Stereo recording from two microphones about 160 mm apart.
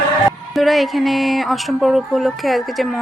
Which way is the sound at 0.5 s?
Centre (ahead or behind).